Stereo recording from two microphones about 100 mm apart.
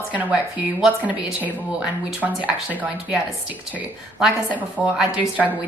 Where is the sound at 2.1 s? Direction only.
15° right (ahead or behind).